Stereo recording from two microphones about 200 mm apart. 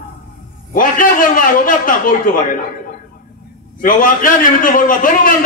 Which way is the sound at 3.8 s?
45° left (ahead or behind).